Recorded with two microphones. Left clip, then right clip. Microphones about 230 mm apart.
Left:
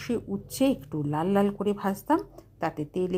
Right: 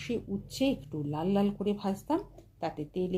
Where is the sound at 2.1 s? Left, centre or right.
Left.